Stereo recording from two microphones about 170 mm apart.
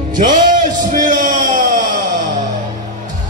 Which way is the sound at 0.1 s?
50° right (ahead or behind).